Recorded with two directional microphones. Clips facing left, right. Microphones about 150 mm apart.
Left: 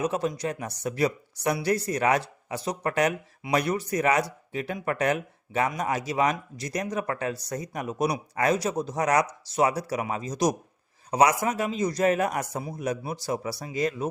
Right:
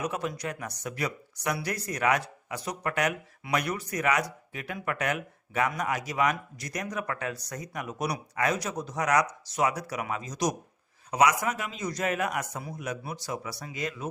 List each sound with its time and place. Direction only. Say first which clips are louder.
0.0 s speech: left 5 dB; 30° left (ahead or behind)